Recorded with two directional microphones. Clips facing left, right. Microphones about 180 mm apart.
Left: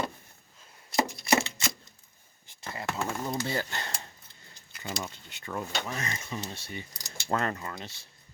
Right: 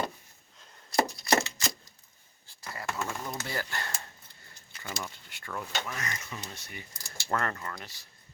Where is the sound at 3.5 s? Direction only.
20° left (ahead or behind).